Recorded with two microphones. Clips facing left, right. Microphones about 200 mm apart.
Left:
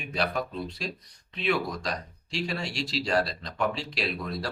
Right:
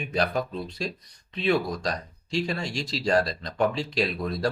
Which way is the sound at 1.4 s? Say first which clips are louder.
Right 4 dB; 40° right (ahead or behind).